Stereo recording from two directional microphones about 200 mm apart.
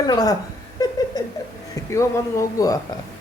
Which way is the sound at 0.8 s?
20° left (ahead or behind).